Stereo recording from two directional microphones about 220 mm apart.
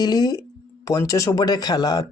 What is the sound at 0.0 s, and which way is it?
Speech, 20° left (ahead or behind).